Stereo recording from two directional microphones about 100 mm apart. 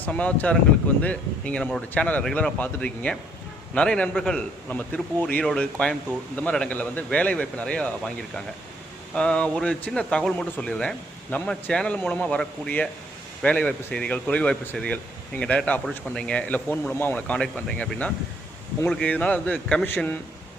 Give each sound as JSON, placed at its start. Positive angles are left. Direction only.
{"t": 0.0, "sound": "speech", "side_deg": 15}